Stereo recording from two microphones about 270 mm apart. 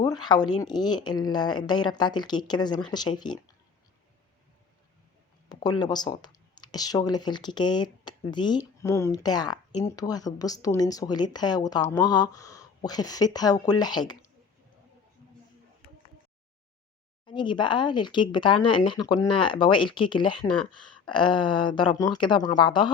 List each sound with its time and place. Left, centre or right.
0.0 s speech: centre
5.8 s speech: centre
17.2 s speech: centre